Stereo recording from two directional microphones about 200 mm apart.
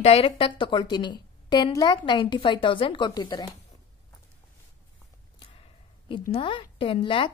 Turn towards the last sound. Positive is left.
turn(degrees=25)  # may be behind; listen again after turning